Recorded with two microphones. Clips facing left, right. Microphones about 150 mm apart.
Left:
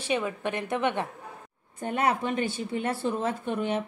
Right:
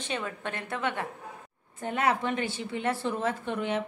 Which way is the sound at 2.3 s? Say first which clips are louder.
Left 3 dB; 40° left (ahead or behind).